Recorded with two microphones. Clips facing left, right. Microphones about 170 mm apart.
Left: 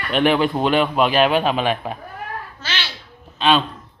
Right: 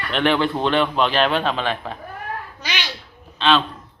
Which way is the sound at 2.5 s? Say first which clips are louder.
Even; 15° right (ahead or behind).